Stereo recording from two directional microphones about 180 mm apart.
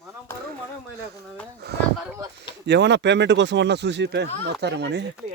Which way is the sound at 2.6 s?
75° right (ahead or behind).